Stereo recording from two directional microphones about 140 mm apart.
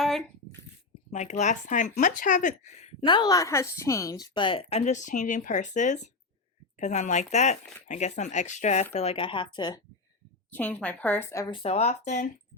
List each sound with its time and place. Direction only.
0.0 s a sound: 5° left (ahead or behind)
1.1 s speech: 55° left (ahead or behind)
3.1 s speech: 30° left (ahead or behind)
4.9 s speech: 60° left (ahead or behind); by 9.8 s 35° left (ahead or behind)
10.5 s a woman's voice: 10° left (ahead or behind)
11.5 s speech: 45° left (ahead or behind)